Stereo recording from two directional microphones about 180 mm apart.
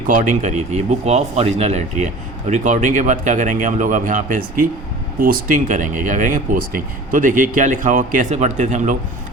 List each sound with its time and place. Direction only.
0.1 s speech: 45° right (ahead or behind)